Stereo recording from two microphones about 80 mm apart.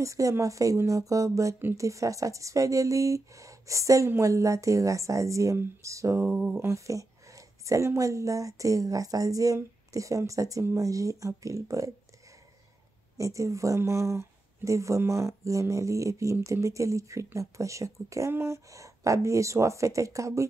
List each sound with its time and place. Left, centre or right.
0.0 s speech: right
6.2 s a sound: centre
6.6 s speech: right
13.2 s speech: right